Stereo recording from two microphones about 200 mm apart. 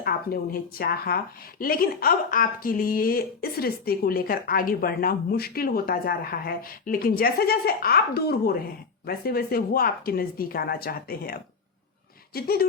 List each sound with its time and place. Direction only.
0.0 s a woman's voice: 50° left (ahead or behind)